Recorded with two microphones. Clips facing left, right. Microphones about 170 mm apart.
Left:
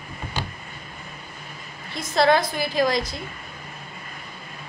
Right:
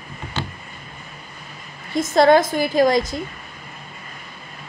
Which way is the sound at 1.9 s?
50° right (ahead or behind).